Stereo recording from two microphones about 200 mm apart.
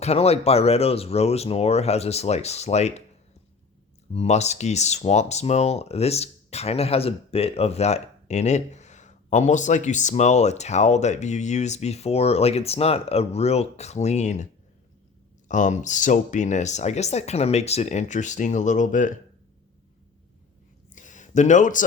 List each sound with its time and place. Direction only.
0.0 s speech: 30° left (ahead or behind)
4.1 s speech: 30° left (ahead or behind)
15.4 s speech: 40° left (ahead or behind)
20.9 s a sound: 40° left (ahead or behind)